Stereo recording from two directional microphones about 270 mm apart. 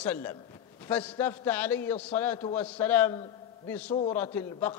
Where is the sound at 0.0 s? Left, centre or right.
Centre.